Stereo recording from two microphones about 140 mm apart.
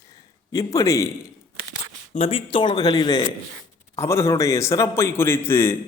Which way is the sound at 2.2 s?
40° left (ahead or behind).